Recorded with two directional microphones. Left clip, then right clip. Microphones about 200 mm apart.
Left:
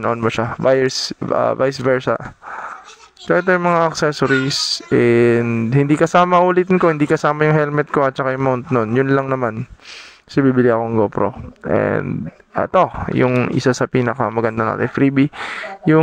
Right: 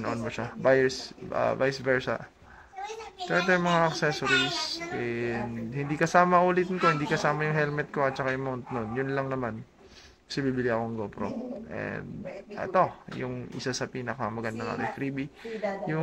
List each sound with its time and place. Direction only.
0.0 s speech: 45° left (ahead or behind)
3.3 s speech: 50° left (ahead or behind)